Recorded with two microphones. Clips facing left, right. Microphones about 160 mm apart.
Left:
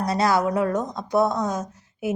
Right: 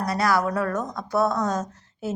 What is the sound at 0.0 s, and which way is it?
A woman's voice, 25° left (ahead or behind).